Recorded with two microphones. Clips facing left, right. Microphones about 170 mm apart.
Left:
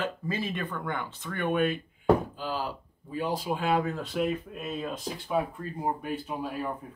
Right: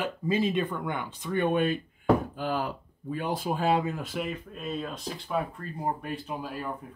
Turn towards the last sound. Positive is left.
turn(degrees=0)  # may be behind; listen again after turning